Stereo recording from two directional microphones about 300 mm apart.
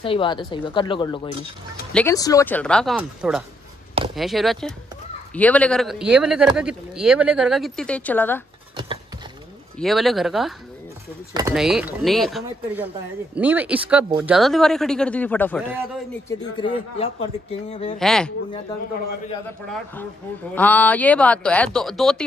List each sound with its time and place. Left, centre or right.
0.0 s speech: centre
1.9 s a man's voice: centre
9.8 s a man's voice: centre
16.3 s a man's voice: centre
17.9 s a man's voice: centre
20.5 s a man's voice: centre